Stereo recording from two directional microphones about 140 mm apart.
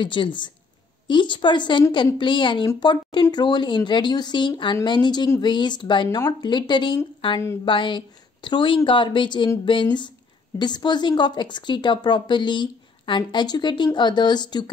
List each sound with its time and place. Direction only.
0.0 s a woman's voice: 35° left (ahead or behind)
6.0 s speech: 20° left (ahead or behind)
6.4 s a woman's voice: 30° left (ahead or behind)